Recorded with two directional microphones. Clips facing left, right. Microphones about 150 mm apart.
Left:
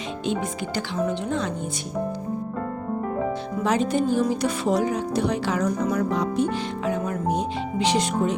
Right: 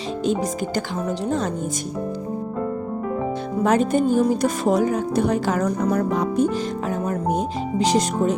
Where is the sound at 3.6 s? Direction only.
50° right (ahead or behind).